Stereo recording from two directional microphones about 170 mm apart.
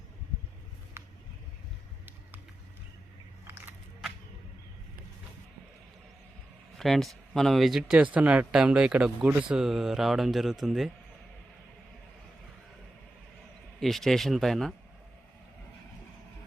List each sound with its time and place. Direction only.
1.0 s a sound: 15° right (ahead or behind)
6.7 s speech: centre (ahead or behind)
13.7 s speech: centre (ahead or behind)